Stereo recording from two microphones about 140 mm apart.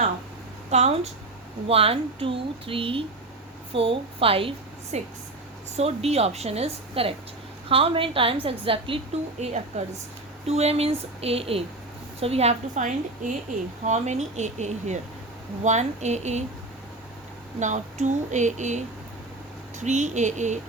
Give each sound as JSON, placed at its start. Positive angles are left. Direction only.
{"t": 0.7, "sound": "a woman's voice", "side_deg": -50}
{"t": 9.4, "sound": "a woman's voice", "side_deg": -55}
{"t": 17.6, "sound": "speech", "side_deg": -60}